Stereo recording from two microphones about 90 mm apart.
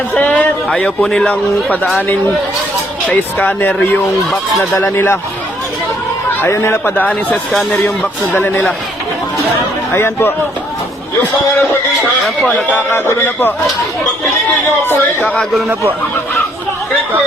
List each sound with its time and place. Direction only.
0.2 s a man's voice: 15° left (ahead or behind)
3.1 s speech: 15° left (ahead or behind)
4.3 s speech: centre (ahead or behind)
4.8 s speech: 25° left (ahead or behind)
6.5 s speech: 30° left (ahead or behind)
9.9 s speech: 25° left (ahead or behind)
12.4 s speech: 15° left (ahead or behind)
12.7 s speech: 25° left (ahead or behind)